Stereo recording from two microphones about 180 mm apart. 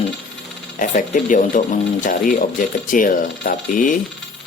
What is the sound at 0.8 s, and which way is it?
Speech, 45° left (ahead or behind).